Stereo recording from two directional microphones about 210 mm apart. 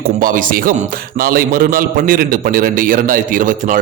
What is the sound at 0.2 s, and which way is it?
A man's voice, 40° right (ahead or behind).